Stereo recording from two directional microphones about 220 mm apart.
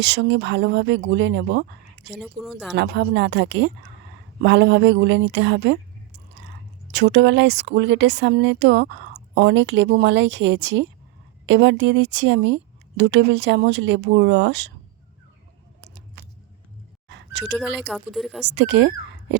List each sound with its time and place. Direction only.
0.0 s speech: 55° right (ahead or behind)
2.1 s speech: centre (ahead or behind)
2.7 s speech: 50° right (ahead or behind)
6.9 s speech: 50° right (ahead or behind)
17.1 s a sound: 50° right (ahead or behind)
17.4 s speech: centre (ahead or behind)
18.4 s speech: 55° right (ahead or behind)